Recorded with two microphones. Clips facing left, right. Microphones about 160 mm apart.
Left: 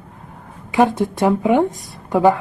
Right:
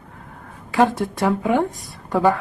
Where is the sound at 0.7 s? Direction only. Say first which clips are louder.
Left 2 dB; 20° left (ahead or behind).